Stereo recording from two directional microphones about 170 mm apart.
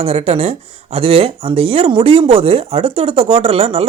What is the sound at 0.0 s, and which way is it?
Speech, 35° right (ahead or behind).